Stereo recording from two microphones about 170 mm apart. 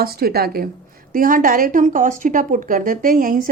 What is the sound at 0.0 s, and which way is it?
A woman's voice, 65° right (ahead or behind).